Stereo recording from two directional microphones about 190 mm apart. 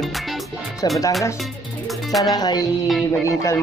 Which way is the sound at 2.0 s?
Centre (ahead or behind).